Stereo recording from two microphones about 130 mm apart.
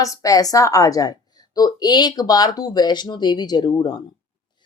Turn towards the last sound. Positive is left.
turn(degrees=30)  # may be behind; listen again after turning